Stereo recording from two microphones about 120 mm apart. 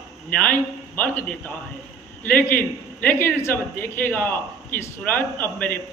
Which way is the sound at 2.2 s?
15° left (ahead or behind).